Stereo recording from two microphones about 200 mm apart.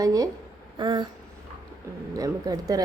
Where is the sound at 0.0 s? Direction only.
15° right (ahead or behind).